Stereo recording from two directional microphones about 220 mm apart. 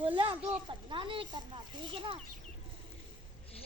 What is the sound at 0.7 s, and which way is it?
Speech, 20° right (ahead or behind).